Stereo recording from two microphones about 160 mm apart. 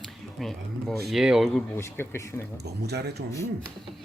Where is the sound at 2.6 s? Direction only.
90° right.